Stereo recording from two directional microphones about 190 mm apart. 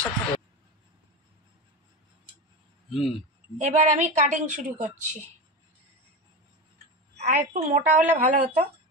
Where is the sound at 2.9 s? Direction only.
Centre (ahead or behind).